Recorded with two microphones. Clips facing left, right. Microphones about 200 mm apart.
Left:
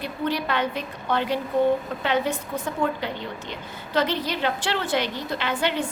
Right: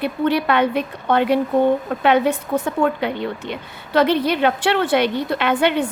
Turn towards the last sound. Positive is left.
turn(degrees=-60)  # may be behind; listen again after turning